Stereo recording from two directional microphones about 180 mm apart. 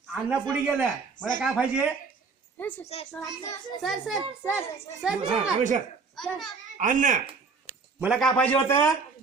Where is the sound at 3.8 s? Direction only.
Centre (ahead or behind).